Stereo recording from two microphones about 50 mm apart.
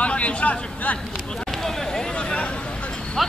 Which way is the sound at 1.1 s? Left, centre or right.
Centre.